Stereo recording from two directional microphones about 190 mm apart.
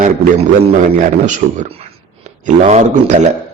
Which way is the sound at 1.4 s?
50° right (ahead or behind).